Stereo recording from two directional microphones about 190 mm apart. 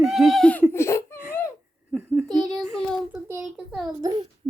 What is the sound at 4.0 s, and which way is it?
Speech, 20° right (ahead or behind).